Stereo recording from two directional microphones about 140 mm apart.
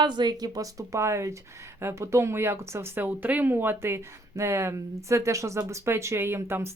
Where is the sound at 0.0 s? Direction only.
30° right (ahead or behind).